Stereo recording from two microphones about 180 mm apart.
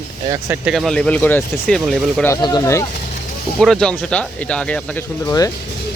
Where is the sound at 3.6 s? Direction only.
5° left (ahead or behind).